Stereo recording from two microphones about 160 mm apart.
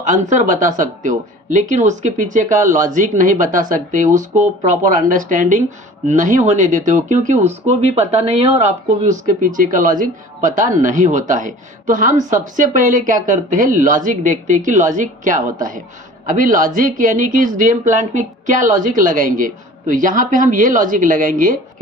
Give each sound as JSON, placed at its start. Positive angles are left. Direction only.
{"t": 0.0, "sound": "speech", "side_deg": -50}